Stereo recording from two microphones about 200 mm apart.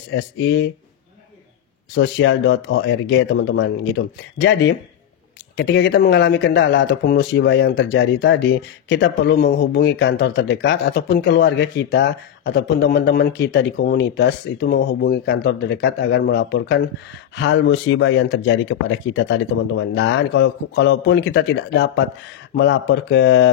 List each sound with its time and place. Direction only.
0.1 s speech: 60° left (ahead or behind)
2.0 s speech: 60° left (ahead or behind)